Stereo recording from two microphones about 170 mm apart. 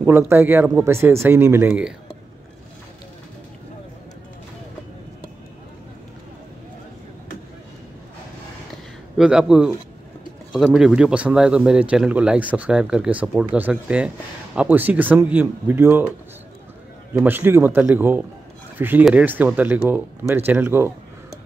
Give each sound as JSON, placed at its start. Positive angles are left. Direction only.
{"t": 0.0, "sound": "speech", "side_deg": -15}
{"t": 9.1, "sound": "speech", "side_deg": -5}
{"t": 17.1, "sound": "speech", "side_deg": -10}